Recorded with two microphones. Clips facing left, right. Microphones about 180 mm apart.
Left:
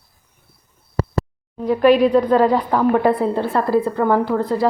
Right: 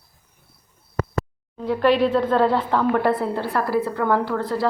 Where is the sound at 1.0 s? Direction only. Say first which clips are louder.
Left 3 dB; 30° left (ahead or behind).